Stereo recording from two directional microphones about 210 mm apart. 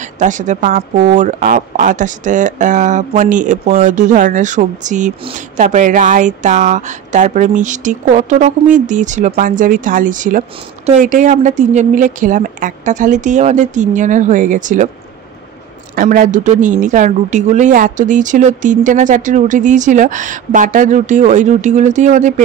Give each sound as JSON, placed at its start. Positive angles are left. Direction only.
{"t": 0.0, "sound": "speech", "side_deg": -35}
{"t": 15.9, "sound": "speech", "side_deg": -40}